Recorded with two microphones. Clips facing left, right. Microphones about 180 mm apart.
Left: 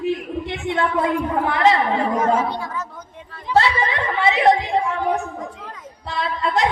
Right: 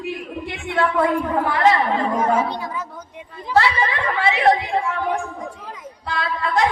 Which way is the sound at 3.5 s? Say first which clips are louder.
Even; 20° left (ahead or behind).